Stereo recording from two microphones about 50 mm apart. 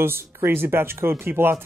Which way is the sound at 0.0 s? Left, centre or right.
Right.